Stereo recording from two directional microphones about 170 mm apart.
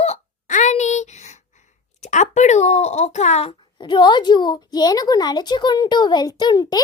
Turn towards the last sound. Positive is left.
turn(degrees=25)  # may be behind; listen again after turning